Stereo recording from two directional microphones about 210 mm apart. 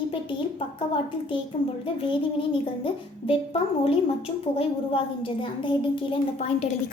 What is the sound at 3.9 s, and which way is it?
A woman's voice, 25° left (ahead or behind).